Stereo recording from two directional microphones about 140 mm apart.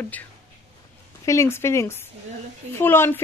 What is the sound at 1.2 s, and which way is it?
A woman's voice, 20° left (ahead or behind).